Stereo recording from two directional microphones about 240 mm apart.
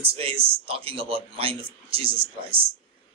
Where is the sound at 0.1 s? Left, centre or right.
Right.